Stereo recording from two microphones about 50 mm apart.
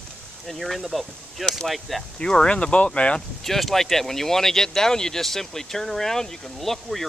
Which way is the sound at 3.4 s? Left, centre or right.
Centre.